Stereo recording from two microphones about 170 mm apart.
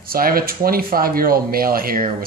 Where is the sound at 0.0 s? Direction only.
60° right (ahead or behind).